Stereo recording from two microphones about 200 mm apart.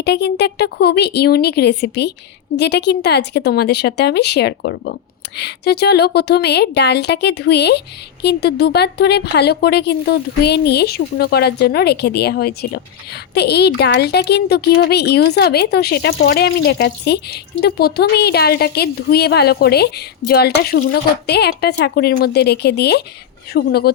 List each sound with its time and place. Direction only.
0.0 s a woman's voice: 55° left (ahead or behind)